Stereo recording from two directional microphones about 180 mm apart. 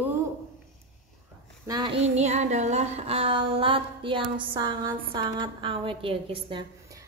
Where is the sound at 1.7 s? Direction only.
25° right (ahead or behind).